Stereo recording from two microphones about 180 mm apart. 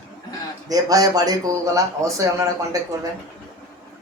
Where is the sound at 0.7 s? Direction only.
20° right (ahead or behind).